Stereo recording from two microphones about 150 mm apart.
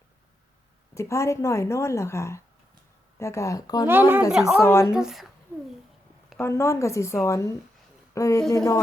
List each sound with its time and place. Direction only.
0.9 s a woman's voice: 20° left (ahead or behind)
3.8 s speech: 15° right (ahead or behind)
4.3 s speech: 5° right (ahead or behind)
4.6 s a woman's voice: 20° left (ahead or behind)
4.9 s speech: centre (ahead or behind)
6.4 s a woman's voice: 20° left (ahead or behind)